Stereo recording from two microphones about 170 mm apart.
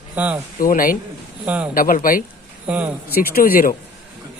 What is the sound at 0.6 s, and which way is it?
Speech, 55° left (ahead or behind).